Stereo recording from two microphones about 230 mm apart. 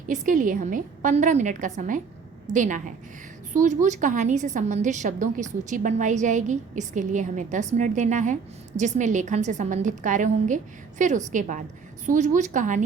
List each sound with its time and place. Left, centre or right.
0.1 s a woman's voice: right